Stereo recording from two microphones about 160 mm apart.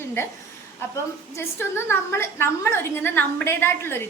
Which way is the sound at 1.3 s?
15° left (ahead or behind).